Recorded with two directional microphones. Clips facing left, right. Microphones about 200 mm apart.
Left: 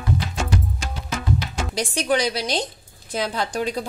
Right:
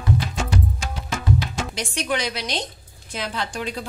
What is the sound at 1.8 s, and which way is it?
A woman's voice, 35° left (ahead or behind).